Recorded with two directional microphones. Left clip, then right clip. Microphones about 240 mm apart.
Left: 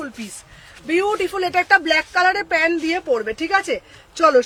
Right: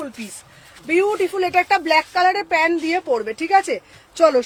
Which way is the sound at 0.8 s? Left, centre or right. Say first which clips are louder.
Right 1 dB; centre.